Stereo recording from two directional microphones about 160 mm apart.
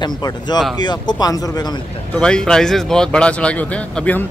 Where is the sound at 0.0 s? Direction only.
25° left (ahead or behind).